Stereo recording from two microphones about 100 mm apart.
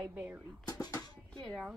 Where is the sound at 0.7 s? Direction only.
40° left (ahead or behind).